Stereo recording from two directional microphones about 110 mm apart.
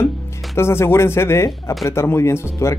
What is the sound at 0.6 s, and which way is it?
Speech, 25° left (ahead or behind).